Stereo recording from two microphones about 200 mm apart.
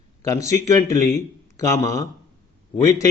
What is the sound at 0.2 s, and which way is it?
A man's voice, 15° left (ahead or behind).